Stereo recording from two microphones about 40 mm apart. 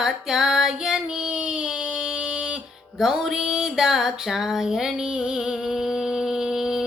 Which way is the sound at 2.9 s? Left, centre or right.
Centre.